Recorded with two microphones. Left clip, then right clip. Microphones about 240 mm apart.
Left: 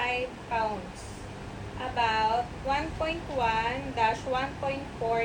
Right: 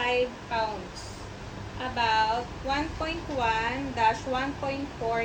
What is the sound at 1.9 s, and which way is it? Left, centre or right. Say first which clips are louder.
A woman's voice: right 1 dB; right.